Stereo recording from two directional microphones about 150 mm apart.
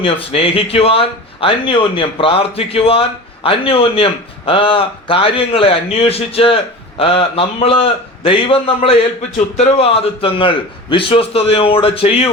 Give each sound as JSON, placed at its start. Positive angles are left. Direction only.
{"t": 0.0, "sound": "a man's voice", "side_deg": 40}